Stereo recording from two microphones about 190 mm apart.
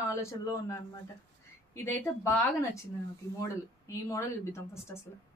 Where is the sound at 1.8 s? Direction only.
15° left (ahead or behind).